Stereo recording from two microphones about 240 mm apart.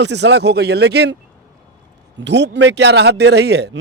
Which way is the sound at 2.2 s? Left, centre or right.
Right.